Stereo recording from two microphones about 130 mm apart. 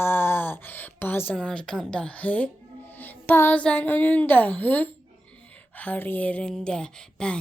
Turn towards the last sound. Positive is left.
turn(degrees=5)  # may be behind; listen again after turning